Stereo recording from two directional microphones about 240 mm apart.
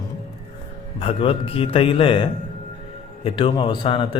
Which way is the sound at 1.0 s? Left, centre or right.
Left.